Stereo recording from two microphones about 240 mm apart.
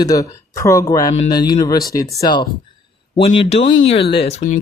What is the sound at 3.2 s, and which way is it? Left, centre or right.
A man's voice, left.